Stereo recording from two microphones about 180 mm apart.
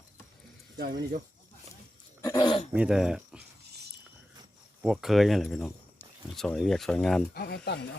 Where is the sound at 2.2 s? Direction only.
20° left (ahead or behind).